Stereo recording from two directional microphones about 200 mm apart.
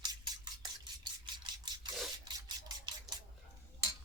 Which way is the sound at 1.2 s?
20° right (ahead or behind).